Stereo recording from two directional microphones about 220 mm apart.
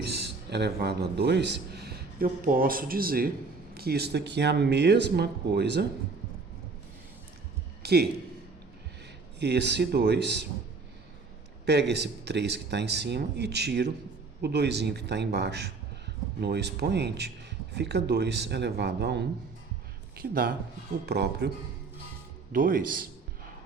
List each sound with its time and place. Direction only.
0.0 s a man's voice: 50° right (ahead or behind)
7.8 s a sound: 45° right (ahead or behind)
9.4 s speech: 50° right (ahead or behind)
11.6 s speech: 50° right (ahead or behind)
22.5 s speech: 40° right (ahead or behind)